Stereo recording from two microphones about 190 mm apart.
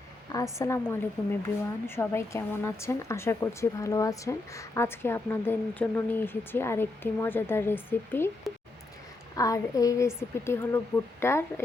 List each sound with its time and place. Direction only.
0.3 s speech: 15° left (ahead or behind)
9.3 s speech: 20° left (ahead or behind)